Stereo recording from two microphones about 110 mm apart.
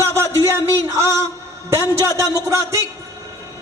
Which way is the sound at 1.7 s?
25° right (ahead or behind).